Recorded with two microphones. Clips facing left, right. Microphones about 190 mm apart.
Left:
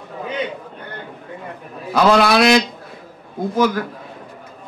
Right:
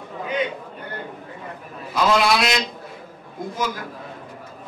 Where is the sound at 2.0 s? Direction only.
65° left (ahead or behind).